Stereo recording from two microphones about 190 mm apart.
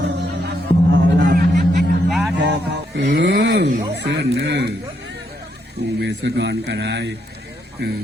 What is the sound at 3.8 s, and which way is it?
Music, 60° right (ahead or behind).